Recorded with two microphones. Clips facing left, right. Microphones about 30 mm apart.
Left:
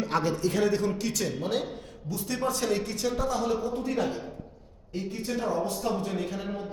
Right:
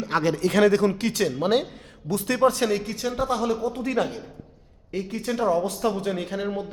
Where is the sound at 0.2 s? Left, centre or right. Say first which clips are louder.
Right 8 dB; right.